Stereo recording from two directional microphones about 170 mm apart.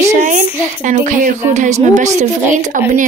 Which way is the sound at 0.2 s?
50° right (ahead or behind).